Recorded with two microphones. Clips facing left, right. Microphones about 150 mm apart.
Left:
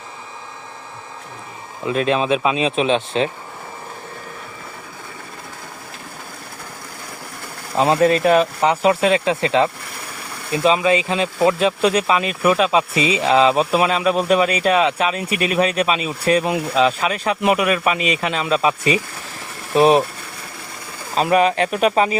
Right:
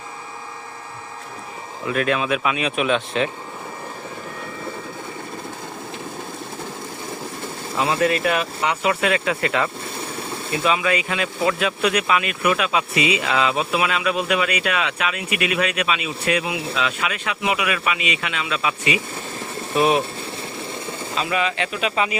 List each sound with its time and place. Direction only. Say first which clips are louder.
1.9 s speech: left 3 dB; 25° left (ahead or behind)
8.0 s speech: left 7 dB; 30° left (ahead or behind)
9.8 s vehicle: right 4 dB; 25° right (ahead or behind)
10.8 s speech: left 5 dB; 25° left (ahead or behind)
16.4 s speech: left 6 dB; 55° left (ahead or behind)
16.7 s speech: left 10 dB; 35° left (ahead or behind)
21.2 s speech: left 8 dB; 45° left (ahead or behind)